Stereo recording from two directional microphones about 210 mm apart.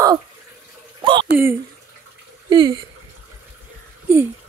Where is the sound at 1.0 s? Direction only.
25° right (ahead or behind).